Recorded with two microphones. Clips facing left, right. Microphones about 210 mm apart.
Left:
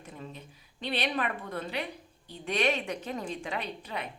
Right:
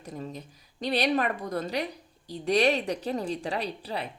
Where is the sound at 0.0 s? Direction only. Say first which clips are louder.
Right 6 dB; 40° right (ahead or behind).